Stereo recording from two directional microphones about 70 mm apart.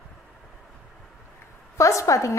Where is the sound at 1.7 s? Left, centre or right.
Left.